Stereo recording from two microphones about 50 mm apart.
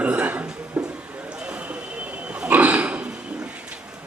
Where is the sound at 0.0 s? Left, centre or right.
Right.